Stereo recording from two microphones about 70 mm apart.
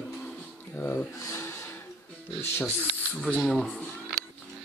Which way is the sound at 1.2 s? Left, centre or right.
Left.